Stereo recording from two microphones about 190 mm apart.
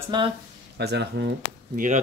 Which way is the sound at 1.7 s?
45° right (ahead or behind).